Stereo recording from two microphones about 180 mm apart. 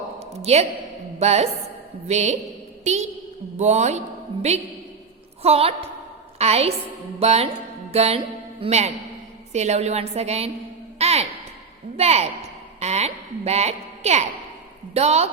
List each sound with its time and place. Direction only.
0.4 s a woman's voice: 35° right (ahead or behind)
3.6 s a woman's voice: 40° right (ahead or behind)
5.4 s a woman's voice: 35° right (ahead or behind)
10.9 s music: 35° right (ahead or behind)
11.9 s a woman's voice: 35° right (ahead or behind)